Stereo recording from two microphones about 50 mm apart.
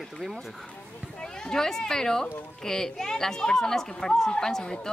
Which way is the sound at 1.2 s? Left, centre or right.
Centre.